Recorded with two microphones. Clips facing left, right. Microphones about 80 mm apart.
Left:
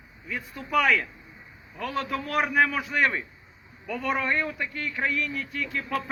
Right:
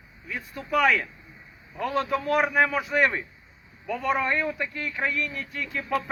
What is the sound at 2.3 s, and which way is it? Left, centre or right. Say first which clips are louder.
A man's voice: even; centre.